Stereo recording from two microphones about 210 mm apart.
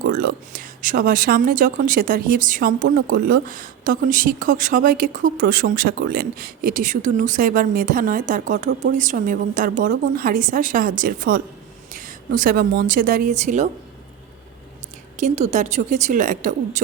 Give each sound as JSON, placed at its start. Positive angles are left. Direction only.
{"t": 0.0, "sound": "a woman's voice", "side_deg": -45}
{"t": 15.2, "sound": "speech", "side_deg": -35}